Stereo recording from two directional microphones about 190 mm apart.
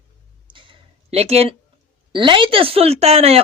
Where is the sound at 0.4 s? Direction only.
25° right (ahead or behind).